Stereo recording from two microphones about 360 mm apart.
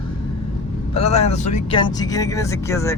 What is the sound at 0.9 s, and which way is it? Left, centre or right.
Speech, centre.